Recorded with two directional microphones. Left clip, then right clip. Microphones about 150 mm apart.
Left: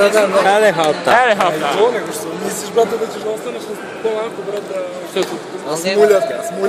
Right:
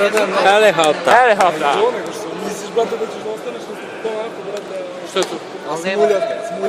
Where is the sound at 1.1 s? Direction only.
30° right (ahead or behind).